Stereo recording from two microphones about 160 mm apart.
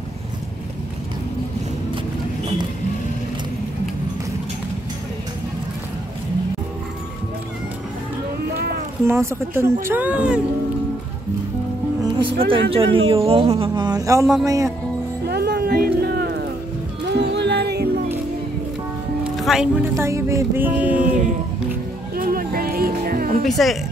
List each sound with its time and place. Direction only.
9.0 s speech: 15° right (ahead or behind)
12.0 s music: 30° right (ahead or behind)
12.7 s speech: 35° right (ahead or behind)
15.2 s music: 90° right
19.3 s speech: centre (ahead or behind)
19.9 s speech: 20° right (ahead or behind)
22.1 s music: 65° right (ahead or behind)
23.4 s speech: centre (ahead or behind)